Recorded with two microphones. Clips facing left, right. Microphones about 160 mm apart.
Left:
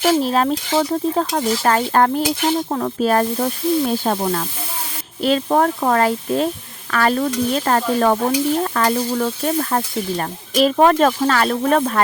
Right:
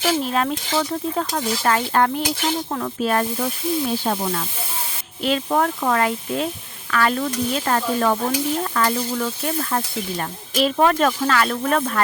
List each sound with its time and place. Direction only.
0.1 s sizzle: 35° left (ahead or behind); by 4.4 s 50° left (ahead or behind)
5.2 s sizzle: 40° left (ahead or behind)